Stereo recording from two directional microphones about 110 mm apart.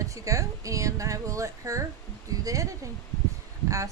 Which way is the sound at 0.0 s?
30° right (ahead or behind).